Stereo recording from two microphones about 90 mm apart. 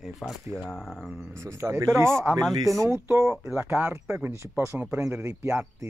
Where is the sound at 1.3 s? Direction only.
30° right (ahead or behind).